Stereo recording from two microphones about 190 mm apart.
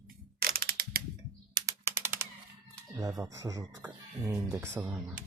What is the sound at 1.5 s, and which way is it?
Typing, 15° right (ahead or behind).